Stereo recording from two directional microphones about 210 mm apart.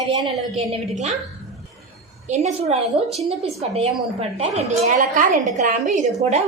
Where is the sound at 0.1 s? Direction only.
30° right (ahead or behind).